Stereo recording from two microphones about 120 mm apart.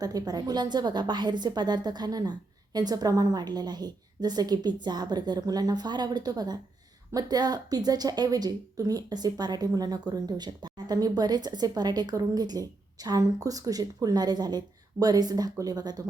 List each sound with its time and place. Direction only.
0.0 s a woman's voice: 30° right (ahead or behind)